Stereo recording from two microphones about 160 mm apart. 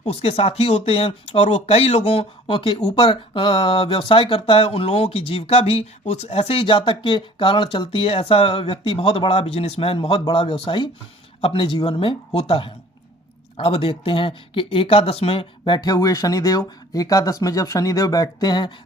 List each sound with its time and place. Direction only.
0.1 s speech: 40° left (ahead or behind)